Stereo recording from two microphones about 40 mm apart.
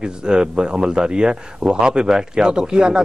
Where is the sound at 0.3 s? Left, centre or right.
Centre.